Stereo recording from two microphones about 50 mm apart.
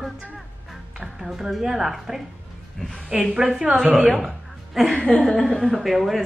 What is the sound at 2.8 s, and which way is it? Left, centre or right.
Speech, centre.